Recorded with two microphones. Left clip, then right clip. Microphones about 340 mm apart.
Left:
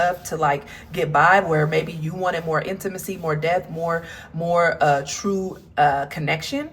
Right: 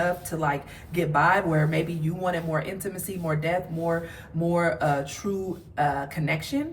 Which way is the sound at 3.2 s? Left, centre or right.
Centre.